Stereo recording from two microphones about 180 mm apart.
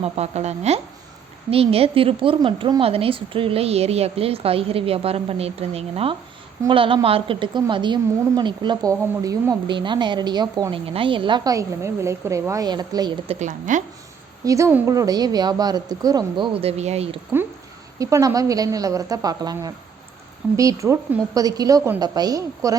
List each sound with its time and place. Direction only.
0.0 s a woman's voice: 35° right (ahead or behind)
13.4 s a woman's voice: 45° right (ahead or behind)
14.4 s a woman's voice: 15° right (ahead or behind)
16.6 s a woman's voice: 35° right (ahead or behind)
18.0 s a woman's voice: 15° right (ahead or behind)